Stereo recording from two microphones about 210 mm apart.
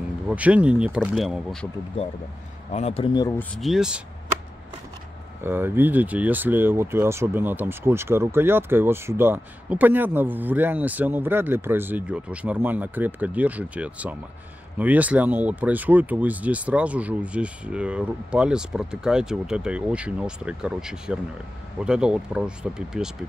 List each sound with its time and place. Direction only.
0.3 s speech: 5° right (ahead or behind)
2.7 s a man's voice: 30° left (ahead or behind)
3.3 s speech: centre (ahead or behind)
5.4 s speech: 10° right (ahead or behind)